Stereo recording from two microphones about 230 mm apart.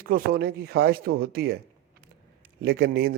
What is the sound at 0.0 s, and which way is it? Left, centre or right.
Speech, right.